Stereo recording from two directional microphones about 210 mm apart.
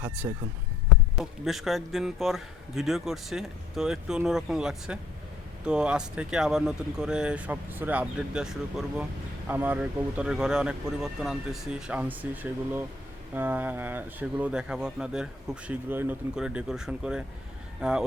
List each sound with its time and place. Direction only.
0.2 s speech: 15° right (ahead or behind)
1.2 s speech: centre (ahead or behind)